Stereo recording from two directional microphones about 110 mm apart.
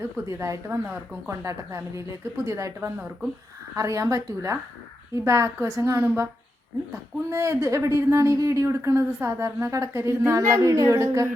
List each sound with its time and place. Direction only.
0.0 s speech: 25° right (ahead or behind)
7.3 s speech: 30° right (ahead or behind)